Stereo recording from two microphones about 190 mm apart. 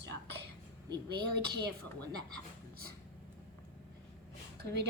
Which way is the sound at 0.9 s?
60° right (ahead or behind).